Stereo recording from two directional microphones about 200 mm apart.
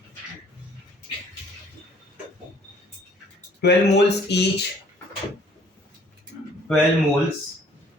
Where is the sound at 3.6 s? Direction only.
55° left (ahead or behind).